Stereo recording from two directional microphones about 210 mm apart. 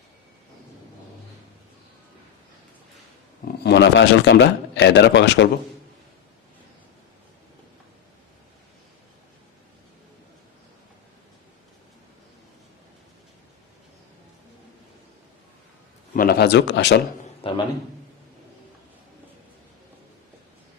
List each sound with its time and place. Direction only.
3.4 s a man's voice: 50° left (ahead or behind)
16.1 s speech: 45° left (ahead or behind)
17.4 s a man's voice: 25° left (ahead or behind)